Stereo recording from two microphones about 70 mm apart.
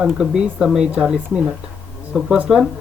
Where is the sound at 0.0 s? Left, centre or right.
Centre.